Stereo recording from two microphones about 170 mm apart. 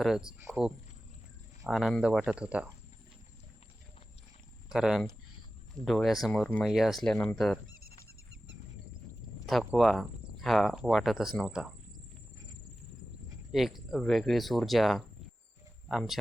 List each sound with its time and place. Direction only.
0.0 s speech: 5° right (ahead or behind)
1.6 s speech: centre (ahead or behind)
4.7 s speech: centre (ahead or behind)
7.8 s a sound: 65° right (ahead or behind)
9.5 s speech: centre (ahead or behind)
13.5 s speech: centre (ahead or behind)